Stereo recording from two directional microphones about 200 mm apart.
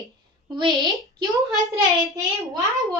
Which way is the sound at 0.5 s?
20° right (ahead or behind).